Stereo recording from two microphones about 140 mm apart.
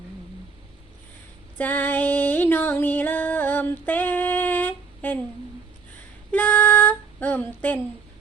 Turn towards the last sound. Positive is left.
turn(degrees=15)  # may be behind; listen again after turning